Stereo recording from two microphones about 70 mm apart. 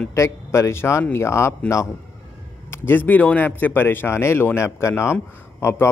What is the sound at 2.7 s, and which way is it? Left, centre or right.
A man's voice, left.